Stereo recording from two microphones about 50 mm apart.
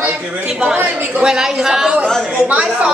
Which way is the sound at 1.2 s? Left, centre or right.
Centre.